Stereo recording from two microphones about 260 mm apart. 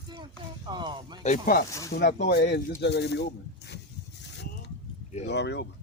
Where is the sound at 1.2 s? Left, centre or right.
Left.